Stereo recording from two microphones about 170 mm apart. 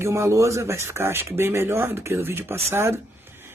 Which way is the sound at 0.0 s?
15° right (ahead or behind).